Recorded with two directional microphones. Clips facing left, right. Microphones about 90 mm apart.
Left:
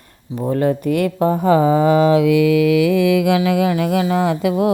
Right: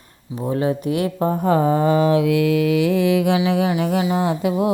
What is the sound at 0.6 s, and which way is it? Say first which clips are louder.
Speech: left 4 dB; 55° left (ahead or behind).